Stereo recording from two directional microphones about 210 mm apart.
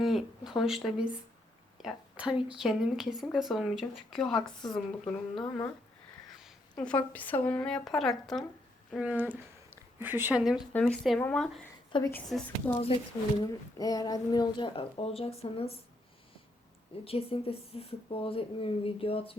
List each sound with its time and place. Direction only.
0.0 s a woman's voice: centre (ahead or behind)
6.4 s a woman's voice: 5° left (ahead or behind)
11.9 s a woman's voice: 20° left (ahead or behind)
12.1 s speech: 10° left (ahead or behind); by 15.7 s 30° left (ahead or behind)
17.0 s speech: 25° left (ahead or behind)